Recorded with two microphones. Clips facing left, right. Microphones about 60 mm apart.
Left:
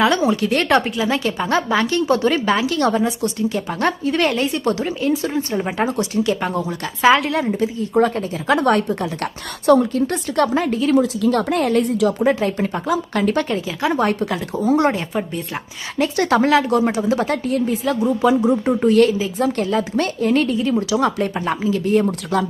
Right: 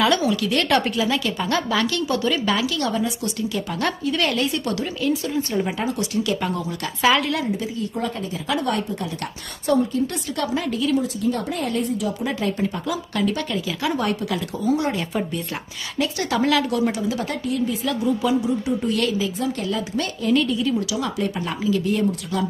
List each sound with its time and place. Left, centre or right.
0.0 s a woman's voice: left
5.7 s a woman's voice: left
7.9 s speech: left
9.6 s a woman's voice: left
10.1 s a woman's voice: left
10.9 s speech: left
12.2 s a woman's voice: left
13.7 s a woman's voice: left
19.4 s a woman's voice: left